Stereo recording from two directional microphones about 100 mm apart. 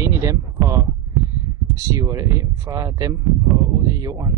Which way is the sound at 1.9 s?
35° right (ahead or behind).